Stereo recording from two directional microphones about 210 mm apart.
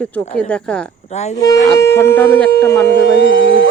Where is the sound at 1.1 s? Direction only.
35° left (ahead or behind).